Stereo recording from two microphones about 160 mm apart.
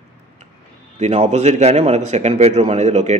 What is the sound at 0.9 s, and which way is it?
Speech, 45° right (ahead or behind).